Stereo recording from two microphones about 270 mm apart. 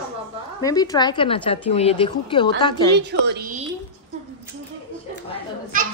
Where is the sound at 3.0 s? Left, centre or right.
Right.